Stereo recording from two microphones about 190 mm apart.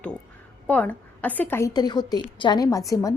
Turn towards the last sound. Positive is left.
turn(degrees=15)  # may be behind; listen again after turning